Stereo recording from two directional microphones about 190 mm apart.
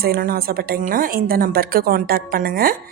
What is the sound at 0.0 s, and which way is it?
A woman's voice, 50° right (ahead or behind).